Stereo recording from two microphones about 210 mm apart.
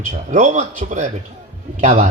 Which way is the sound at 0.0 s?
35° right (ahead or behind).